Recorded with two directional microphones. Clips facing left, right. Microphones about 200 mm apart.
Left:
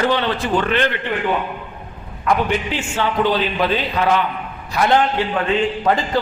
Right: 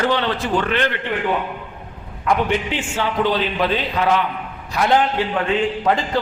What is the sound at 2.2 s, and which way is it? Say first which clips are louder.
Speech: even; 20° right (ahead or behind).